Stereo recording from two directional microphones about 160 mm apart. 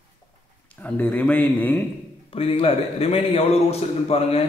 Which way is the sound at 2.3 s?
35° left (ahead or behind).